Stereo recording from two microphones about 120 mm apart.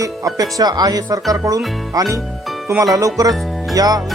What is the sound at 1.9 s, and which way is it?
Music, 25° right (ahead or behind).